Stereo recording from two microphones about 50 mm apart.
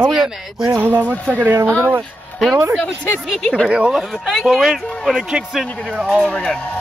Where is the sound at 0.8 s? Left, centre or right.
Right.